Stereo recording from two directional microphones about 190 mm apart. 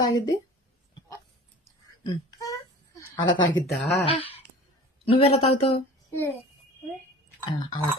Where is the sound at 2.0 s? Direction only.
20° left (ahead or behind).